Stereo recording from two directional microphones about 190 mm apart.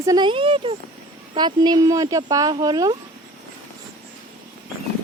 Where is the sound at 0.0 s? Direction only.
20° right (ahead or behind).